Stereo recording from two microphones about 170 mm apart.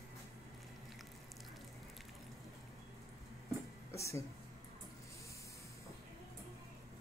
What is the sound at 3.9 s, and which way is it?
Music, 15° left (ahead or behind).